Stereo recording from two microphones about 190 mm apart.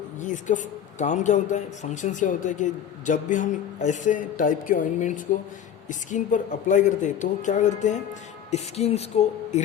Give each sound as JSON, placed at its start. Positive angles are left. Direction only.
{"t": 0.2, "sound": "speech", "side_deg": 40}